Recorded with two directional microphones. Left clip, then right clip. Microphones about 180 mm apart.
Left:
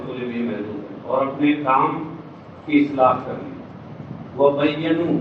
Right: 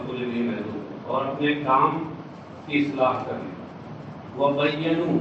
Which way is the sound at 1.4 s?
15° left (ahead or behind).